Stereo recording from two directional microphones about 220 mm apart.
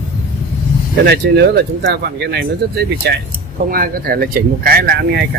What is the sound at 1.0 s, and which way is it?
Speech, 50° right (ahead or behind).